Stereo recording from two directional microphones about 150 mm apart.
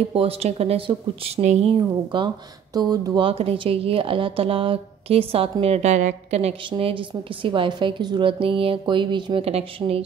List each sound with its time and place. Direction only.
0.1 s speech: 40° right (ahead or behind)
1.7 s speech: 30° right (ahead or behind); by 6.5 s 50° right (ahead or behind)
6.7 s speech: 35° right (ahead or behind)